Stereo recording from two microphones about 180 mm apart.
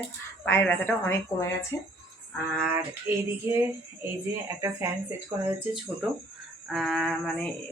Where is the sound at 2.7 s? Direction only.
10° right (ahead or behind).